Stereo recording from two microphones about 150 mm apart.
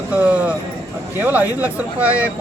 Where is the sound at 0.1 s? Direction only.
10° right (ahead or behind).